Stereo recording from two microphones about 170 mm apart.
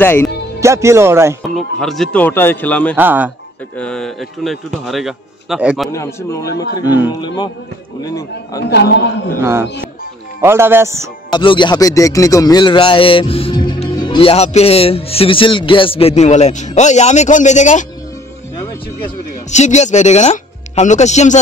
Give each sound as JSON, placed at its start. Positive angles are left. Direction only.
{"t": 0.0, "sound": "a man's voice", "side_deg": 10}
{"t": 0.6, "sound": "speech", "side_deg": -15}
{"t": 1.8, "sound": "a man's voice", "side_deg": 0}
{"t": 3.0, "sound": "speech", "side_deg": -10}
{"t": 3.7, "sound": "speech", "side_deg": 5}
{"t": 5.9, "sound": "a man's voice", "side_deg": 15}
{"t": 8.6, "sound": "a man's voice", "side_deg": 80}
{"t": 9.4, "sound": "speech", "side_deg": -15}
{"t": 11.3, "sound": "a man's voice", "side_deg": 25}
{"t": 19.5, "sound": "speech", "side_deg": 45}